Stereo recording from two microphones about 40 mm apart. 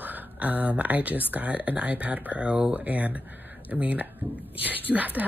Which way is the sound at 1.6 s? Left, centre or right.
Right.